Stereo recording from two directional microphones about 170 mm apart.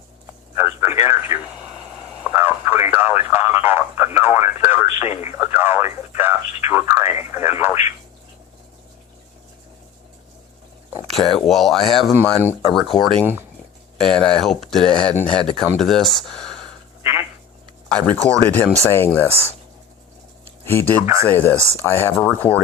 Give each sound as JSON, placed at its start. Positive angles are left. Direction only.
{"t": 0.5, "sound": "a sound", "side_deg": -15}
{"t": 1.0, "sound": "speech", "side_deg": -15}
{"t": 4.9, "sound": "speech", "side_deg": 40}
{"t": 5.2, "sound": "speech", "side_deg": -15}
{"t": 11.1, "sound": "speech", "side_deg": 0}
{"t": 12.1, "sound": "speech", "side_deg": -15}
{"t": 12.7, "sound": "speech", "side_deg": 0}
{"t": 17.0, "sound": "a sound", "side_deg": -15}
{"t": 17.8, "sound": "speech", "side_deg": 5}
{"t": 20.7, "sound": "speech", "side_deg": 10}